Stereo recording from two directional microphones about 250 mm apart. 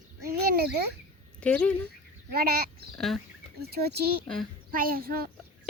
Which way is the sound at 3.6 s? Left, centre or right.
Right.